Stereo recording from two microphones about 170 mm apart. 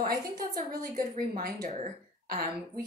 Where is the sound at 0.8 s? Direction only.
60° right (ahead or behind).